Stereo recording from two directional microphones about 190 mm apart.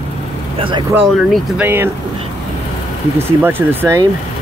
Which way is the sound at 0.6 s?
25° right (ahead or behind).